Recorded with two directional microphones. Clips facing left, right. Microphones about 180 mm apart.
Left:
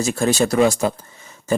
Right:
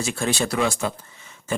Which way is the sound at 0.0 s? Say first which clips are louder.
Left 6 dB; 40° left (ahead or behind).